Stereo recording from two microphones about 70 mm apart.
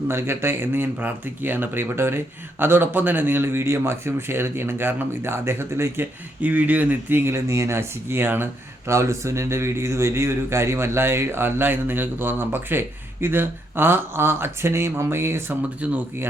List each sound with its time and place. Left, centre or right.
0.1 s speech: right
6.4 s speech: right
7.3 s speech: right
8.9 s speech: right
15.8 s speech: right